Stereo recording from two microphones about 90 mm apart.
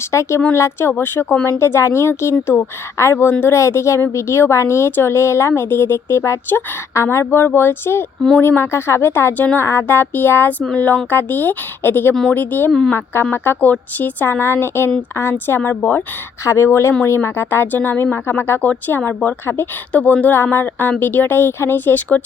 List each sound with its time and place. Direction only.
0.1 s a woman's voice: 30° left (ahead or behind)
16.4 s a woman's voice: 30° left (ahead or behind)